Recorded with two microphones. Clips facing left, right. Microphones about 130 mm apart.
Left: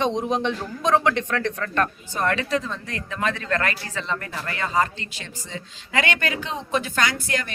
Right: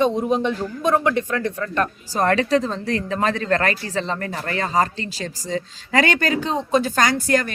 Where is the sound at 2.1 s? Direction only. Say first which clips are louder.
Right 6 dB; 35° right (ahead or behind).